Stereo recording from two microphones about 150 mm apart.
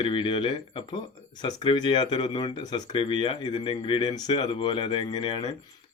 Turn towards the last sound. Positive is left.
turn(degrees=30)  # may be behind; listen again after turning